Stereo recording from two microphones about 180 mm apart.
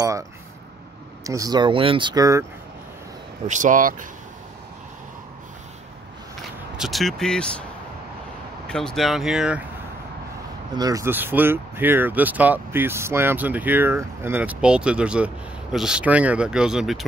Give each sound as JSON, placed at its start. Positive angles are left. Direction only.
{"t": 1.2, "sound": "speech", "side_deg": -20}
{"t": 3.4, "sound": "speech", "side_deg": -45}
{"t": 6.8, "sound": "speech", "side_deg": 0}
{"t": 8.6, "sound": "speech", "side_deg": 5}
{"t": 10.8, "sound": "speech", "side_deg": -20}